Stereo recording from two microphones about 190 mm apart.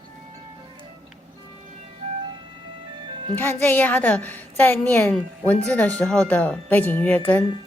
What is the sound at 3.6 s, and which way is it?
Speech, 10° left (ahead or behind).